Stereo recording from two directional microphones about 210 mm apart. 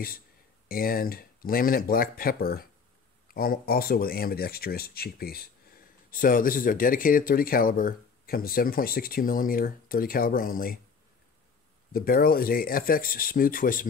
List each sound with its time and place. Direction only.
0.7 s speech: 45° left (ahead or behind)
11.9 s speech: 45° left (ahead or behind)